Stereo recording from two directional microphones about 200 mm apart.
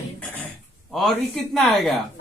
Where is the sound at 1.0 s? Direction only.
Centre (ahead or behind).